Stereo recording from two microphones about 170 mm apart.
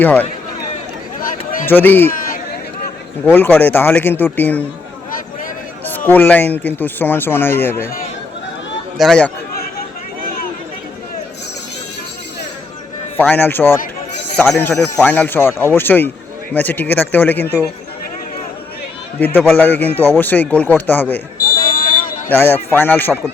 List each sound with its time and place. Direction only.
0.0 s speech: 10° left (ahead or behind)
1.2 s a sound: 50° left (ahead or behind)
1.6 s speech: 10° left (ahead or behind)
3.2 s speech: 10° left (ahead or behind)
6.1 s speech: 10° left (ahead or behind)
9.0 s speech: 5° left (ahead or behind)
13.1 s speech: 10° left (ahead or behind)
14.8 s speech: 5° left (ahead or behind)
19.5 s speech: 10° left (ahead or behind)
21.3 s a sound: 55° left (ahead or behind)
22.3 s speech: 10° left (ahead or behind)